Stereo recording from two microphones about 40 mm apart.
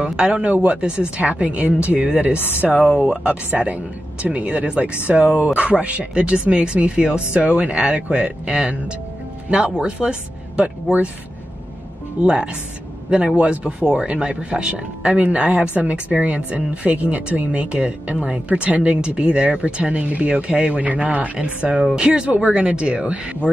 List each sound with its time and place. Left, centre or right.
0.0 s speech: right
2.6 s speech: centre
3.6 s speech: right
12.2 s speech: right
18.1 s speech: centre
18.5 s speech: right
21.9 s speech: right